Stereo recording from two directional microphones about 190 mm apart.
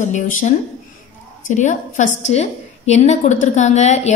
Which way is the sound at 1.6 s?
40° left (ahead or behind).